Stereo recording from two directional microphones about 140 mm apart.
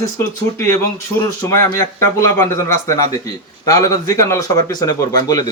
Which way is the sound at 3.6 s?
25° left (ahead or behind).